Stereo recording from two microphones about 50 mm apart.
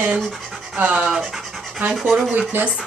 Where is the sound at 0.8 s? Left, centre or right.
Right.